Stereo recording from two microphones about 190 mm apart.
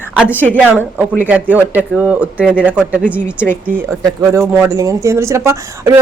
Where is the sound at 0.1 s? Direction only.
5° right (ahead or behind).